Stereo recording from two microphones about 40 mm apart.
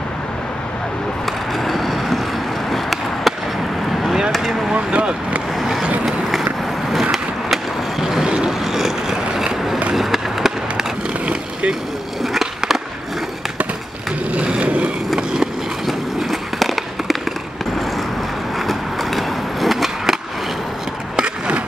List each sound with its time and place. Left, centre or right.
1.6 s vehicle: centre
2.7 s skateboard: centre
4.3 s vehicle: centre
4.7 s vehicle: right
5.6 s vehicle: centre
6.9 s skateboard: centre
8.5 s vehicle: centre
9.9 s skateboard: centre
14.3 s vehicle: right
15.1 s skateboard: centre
16.2 s fireworks: centre
18.7 s skateboard: centre
21.2 s skateboard: right